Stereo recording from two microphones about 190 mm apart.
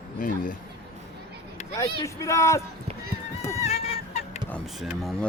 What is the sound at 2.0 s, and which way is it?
Speech, 15° left (ahead or behind).